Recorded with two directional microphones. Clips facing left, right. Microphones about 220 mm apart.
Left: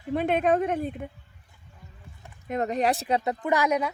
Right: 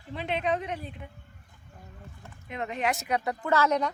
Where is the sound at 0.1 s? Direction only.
50° left (ahead or behind).